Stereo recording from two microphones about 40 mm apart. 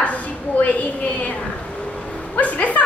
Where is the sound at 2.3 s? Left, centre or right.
Left.